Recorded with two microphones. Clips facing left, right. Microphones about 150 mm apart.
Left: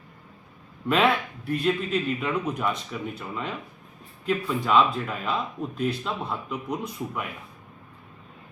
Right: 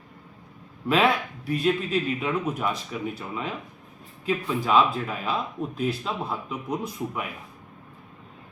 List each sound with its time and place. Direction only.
1.5 s speech: 5° right (ahead or behind)